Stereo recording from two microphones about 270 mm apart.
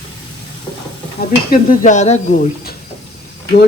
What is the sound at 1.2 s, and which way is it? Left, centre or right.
Speech, left.